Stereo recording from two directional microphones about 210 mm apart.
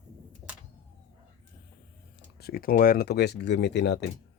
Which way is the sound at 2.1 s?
50° left (ahead or behind).